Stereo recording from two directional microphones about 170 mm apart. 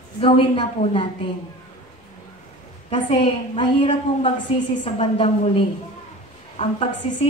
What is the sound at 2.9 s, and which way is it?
A woman's voice, 30° left (ahead or behind).